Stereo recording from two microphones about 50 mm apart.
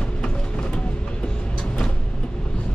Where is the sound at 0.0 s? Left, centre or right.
Centre.